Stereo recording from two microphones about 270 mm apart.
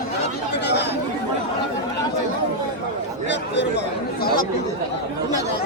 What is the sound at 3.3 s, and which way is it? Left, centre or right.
Speech, left.